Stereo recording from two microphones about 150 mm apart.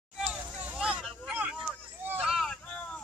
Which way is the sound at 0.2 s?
10° right (ahead or behind).